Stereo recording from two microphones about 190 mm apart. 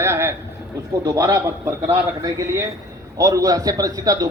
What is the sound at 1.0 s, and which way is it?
Speech, 15° right (ahead or behind).